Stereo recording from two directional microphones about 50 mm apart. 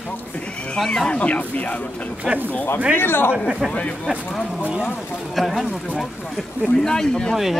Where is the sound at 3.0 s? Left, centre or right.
Left.